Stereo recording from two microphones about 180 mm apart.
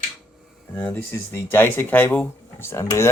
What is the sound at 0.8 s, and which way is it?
Speech, 10° left (ahead or behind).